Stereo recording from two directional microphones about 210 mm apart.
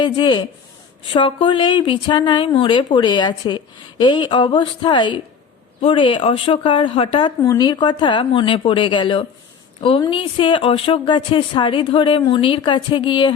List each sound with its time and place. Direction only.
0.0 s speech: 20° left (ahead or behind)